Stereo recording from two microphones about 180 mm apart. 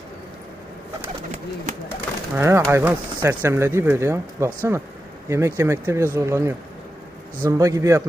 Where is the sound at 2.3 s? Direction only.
15° right (ahead or behind).